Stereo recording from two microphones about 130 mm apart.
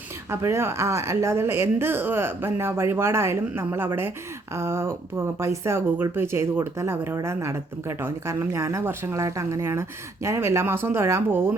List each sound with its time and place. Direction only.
0.3 s speech: 20° right (ahead or behind)